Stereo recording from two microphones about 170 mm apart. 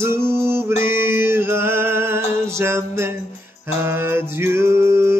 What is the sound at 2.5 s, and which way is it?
Music, 15° right (ahead or behind).